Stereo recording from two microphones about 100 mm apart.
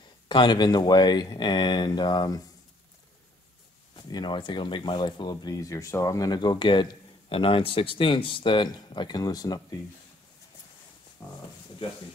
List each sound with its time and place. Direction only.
0.3 s speech: 50° left (ahead or behind)
3.9 s speech: 50° left (ahead or behind)